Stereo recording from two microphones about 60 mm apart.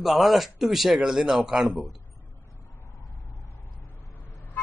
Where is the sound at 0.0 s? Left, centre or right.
Centre.